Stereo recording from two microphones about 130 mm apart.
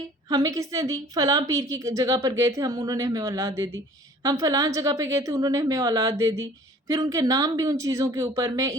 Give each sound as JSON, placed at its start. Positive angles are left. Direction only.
{"t": 0.3, "sound": "a woman's voice", "side_deg": -30}